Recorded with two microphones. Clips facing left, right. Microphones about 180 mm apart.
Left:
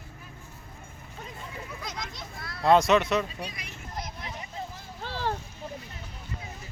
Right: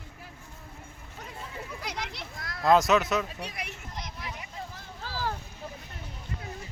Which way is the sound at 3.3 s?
65° right (ahead or behind).